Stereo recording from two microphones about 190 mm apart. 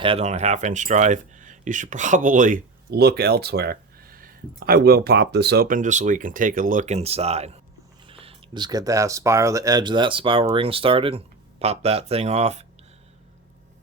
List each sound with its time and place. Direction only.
0.0 s speech: 30° right (ahead or behind)